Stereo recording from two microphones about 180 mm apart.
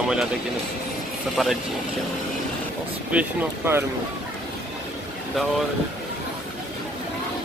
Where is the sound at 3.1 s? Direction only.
10° right (ahead or behind).